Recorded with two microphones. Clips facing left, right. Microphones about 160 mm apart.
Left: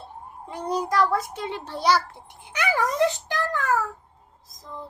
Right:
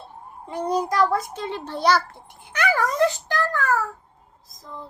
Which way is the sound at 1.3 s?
15° left (ahead or behind).